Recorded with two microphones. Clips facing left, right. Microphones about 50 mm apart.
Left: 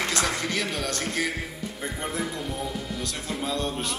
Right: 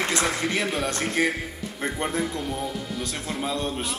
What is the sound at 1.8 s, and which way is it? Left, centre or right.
Speech, right.